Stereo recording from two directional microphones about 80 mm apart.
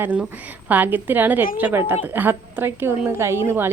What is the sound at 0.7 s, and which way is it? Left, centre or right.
Speech, right.